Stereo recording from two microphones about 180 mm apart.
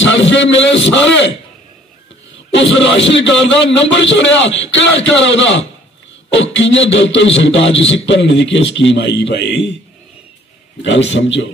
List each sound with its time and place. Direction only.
0.0 s a man's voice: 85° left
2.7 s a man's voice: 90° left
7.9 s a man's voice: 80° left
10.8 s a man's voice: 80° left